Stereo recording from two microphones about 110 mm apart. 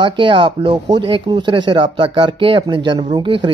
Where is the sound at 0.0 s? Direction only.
50° right (ahead or behind).